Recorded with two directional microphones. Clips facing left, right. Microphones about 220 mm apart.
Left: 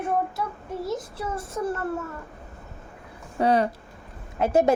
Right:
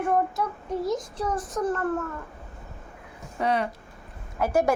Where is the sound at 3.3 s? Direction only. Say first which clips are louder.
Left 4 dB; 35° left (ahead or behind).